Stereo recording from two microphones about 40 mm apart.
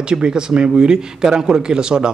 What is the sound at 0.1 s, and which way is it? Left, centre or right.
A man's voice, right.